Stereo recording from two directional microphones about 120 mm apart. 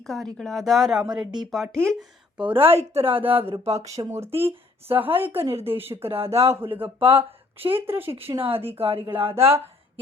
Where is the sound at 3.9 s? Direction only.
25° right (ahead or behind).